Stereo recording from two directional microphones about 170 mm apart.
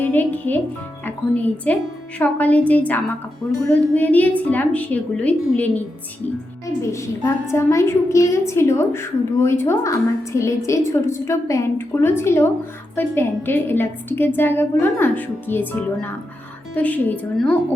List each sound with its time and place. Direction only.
0.0 s a woman's voice: 10° left (ahead or behind)
6.8 s a woman's voice: 15° left (ahead or behind)